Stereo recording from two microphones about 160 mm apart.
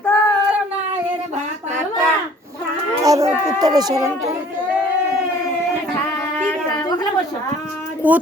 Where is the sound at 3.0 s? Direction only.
20° right (ahead or behind).